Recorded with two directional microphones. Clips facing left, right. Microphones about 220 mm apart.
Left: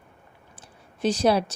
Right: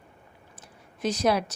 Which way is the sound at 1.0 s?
30° left (ahead or behind).